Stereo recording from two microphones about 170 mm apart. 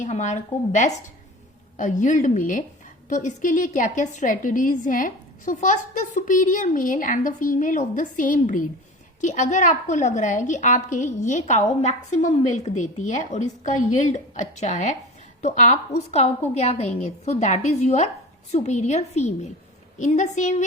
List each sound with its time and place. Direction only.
0.0 s a woman's voice: 45° left (ahead or behind)